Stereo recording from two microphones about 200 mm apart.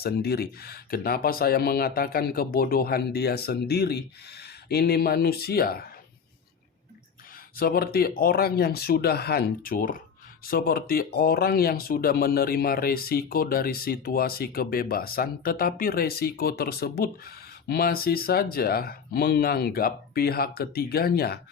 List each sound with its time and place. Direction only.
0.0 s speech: 50° left (ahead or behind)
7.5 s speech: 50° left (ahead or behind)